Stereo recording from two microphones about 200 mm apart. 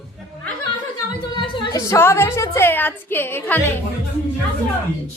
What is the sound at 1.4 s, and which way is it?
A woman's voice, 20° left (ahead or behind).